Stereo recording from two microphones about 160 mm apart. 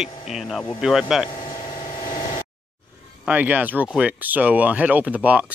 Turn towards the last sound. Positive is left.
turn(degrees=-10)  # may be behind; listen again after turning